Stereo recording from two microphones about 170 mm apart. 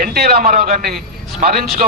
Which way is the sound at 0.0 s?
65° right (ahead or behind).